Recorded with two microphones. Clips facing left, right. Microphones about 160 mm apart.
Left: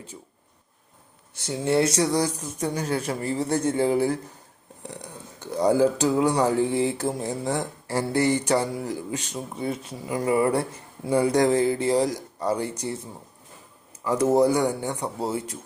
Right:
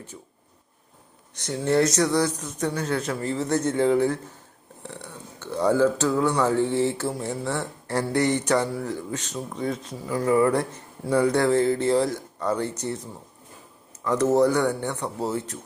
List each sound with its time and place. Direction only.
1.4 s speech: 10° left (ahead or behind)
1.9 s speech: 30° left (ahead or behind)
2.6 s speech: 10° left (ahead or behind)
4.9 s speech: 35° left (ahead or behind)
5.5 s speech: 10° left (ahead or behind)
7.4 s speech: 40° left (ahead or behind)
7.9 s speech: 5° left (ahead or behind)
14.0 s speech: 10° left (ahead or behind)